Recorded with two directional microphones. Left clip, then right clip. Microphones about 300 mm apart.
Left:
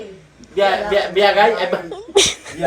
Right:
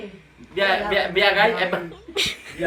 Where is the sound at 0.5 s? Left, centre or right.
Centre.